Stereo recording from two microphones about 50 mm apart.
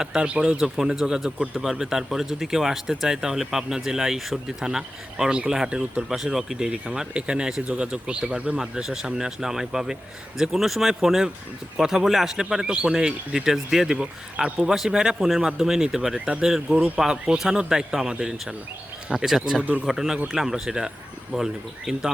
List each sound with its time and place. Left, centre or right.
0.0 s speech: centre
6.1 s speech: centre